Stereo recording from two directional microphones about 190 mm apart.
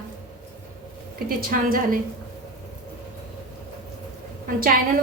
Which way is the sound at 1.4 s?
50° right (ahead or behind).